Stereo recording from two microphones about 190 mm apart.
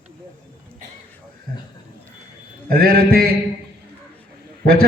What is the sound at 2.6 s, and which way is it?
Mantra, 50° right (ahead or behind).